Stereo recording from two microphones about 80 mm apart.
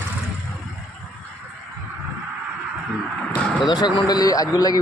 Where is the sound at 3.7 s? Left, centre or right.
Left.